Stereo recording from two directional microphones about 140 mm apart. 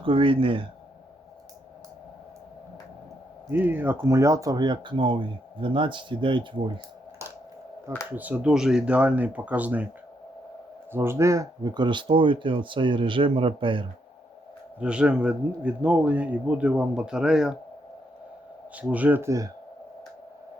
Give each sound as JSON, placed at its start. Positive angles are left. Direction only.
{"t": 0.0, "sound": "speech", "side_deg": -40}
{"t": 3.5, "sound": "speech", "side_deg": -15}
{"t": 8.1, "sound": "a man's voice", "side_deg": -10}
{"t": 10.9, "sound": "speech", "side_deg": -20}
{"t": 14.8, "sound": "a man's voice", "side_deg": -10}
{"t": 18.8, "sound": "a man's voice", "side_deg": -10}